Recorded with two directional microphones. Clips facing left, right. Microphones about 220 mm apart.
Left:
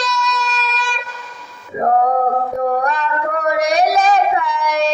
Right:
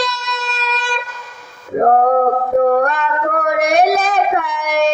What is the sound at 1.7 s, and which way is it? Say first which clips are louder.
Male singing: right 4 dB; 55° right (ahead or behind).